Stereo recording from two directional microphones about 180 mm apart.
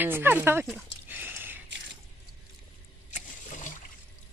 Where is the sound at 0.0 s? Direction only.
10° right (ahead or behind).